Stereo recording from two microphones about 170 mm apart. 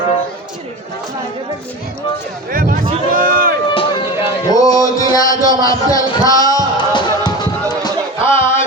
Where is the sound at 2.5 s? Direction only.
55° right (ahead or behind).